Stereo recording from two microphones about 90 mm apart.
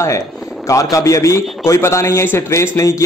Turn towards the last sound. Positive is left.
turn(degrees=35)  # may be behind; listen again after turning